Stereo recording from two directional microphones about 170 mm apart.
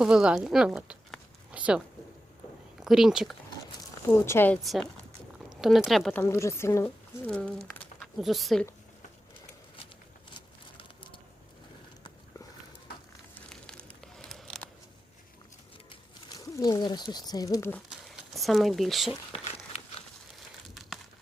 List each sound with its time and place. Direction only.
0.0 s speech: 5° right (ahead or behind)
2.8 s speech: 5° right (ahead or behind)
4.3 s speech: 15° left (ahead or behind)
4.6 s speech: centre (ahead or behind)
13.5 s crumpling: 5° left (ahead or behind)
16.3 s speech: 20° left (ahead or behind)
17.8 s a sound: centre (ahead or behind)
19.3 s a sound: 35° left (ahead or behind)